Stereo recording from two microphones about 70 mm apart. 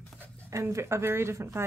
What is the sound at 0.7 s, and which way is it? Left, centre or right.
Speech, right.